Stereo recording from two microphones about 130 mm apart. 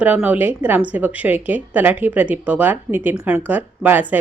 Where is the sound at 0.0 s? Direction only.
10° right (ahead or behind).